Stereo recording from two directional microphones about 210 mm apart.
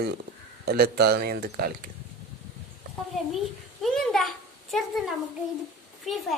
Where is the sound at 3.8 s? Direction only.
Centre (ahead or behind).